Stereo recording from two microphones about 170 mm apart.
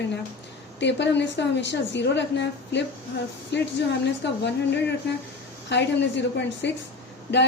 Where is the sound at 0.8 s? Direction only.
90° left.